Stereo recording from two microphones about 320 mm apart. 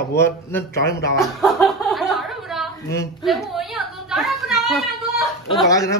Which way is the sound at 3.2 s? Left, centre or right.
Centre.